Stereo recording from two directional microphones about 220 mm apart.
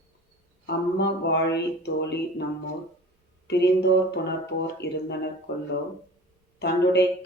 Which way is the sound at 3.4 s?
50° left (ahead or behind).